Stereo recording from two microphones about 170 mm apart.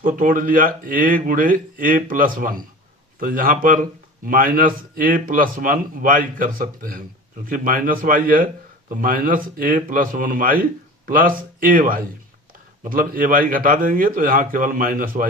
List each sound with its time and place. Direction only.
0.0 s a man's voice: 50° right (ahead or behind)